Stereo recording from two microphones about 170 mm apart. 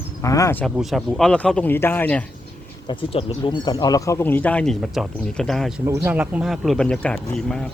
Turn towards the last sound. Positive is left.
turn(degrees=5)  # may be behind; listen again after turning